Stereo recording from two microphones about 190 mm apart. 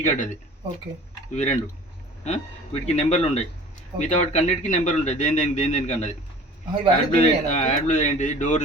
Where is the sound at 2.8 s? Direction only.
35° left (ahead or behind).